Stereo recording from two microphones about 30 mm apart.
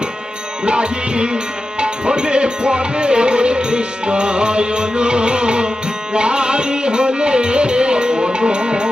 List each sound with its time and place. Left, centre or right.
0.6 s music: right